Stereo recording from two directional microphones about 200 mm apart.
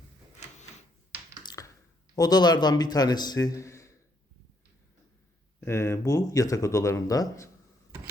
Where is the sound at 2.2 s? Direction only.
20° left (ahead or behind).